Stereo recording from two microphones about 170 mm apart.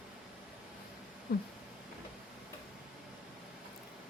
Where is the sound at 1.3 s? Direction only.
60° left (ahead or behind).